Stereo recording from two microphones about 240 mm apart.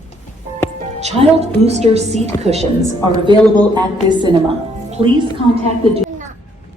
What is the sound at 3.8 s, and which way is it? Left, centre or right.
A woman's voice, centre.